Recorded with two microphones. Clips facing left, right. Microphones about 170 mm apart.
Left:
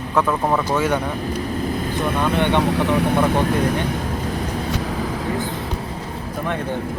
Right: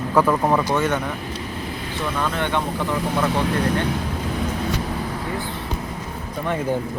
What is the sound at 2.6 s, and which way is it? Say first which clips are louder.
Speech: left 6 dB; 75° left (ahead or behind).